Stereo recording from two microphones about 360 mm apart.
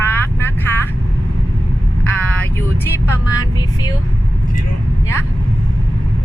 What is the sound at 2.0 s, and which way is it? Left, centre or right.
Vehicle, centre.